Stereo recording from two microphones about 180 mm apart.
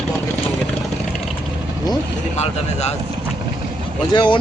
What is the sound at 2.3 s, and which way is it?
Speech, 35° left (ahead or behind).